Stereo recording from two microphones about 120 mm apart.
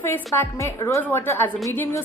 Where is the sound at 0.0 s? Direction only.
20° left (ahead or behind).